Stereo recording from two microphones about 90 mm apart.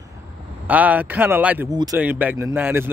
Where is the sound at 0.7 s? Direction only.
20° right (ahead or behind).